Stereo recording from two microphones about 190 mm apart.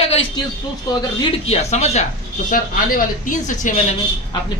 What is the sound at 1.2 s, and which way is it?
Speech, 35° left (ahead or behind).